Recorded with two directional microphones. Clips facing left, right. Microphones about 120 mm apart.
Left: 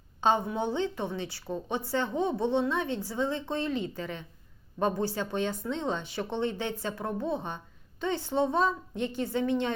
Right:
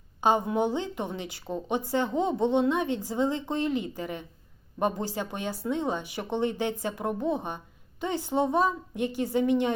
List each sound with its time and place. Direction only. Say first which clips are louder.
0.2 s a woman's voice: right 3 dB; 15° right (ahead or behind)